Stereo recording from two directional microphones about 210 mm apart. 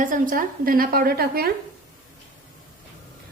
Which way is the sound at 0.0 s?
40° right (ahead or behind).